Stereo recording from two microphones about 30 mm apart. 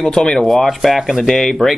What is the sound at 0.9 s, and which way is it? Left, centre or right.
Speech, centre.